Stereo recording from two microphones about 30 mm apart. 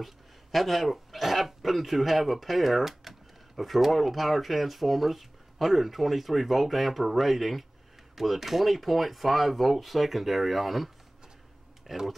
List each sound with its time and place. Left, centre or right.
0.0 s speech: centre